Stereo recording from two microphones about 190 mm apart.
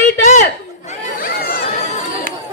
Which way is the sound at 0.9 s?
50° left (ahead or behind).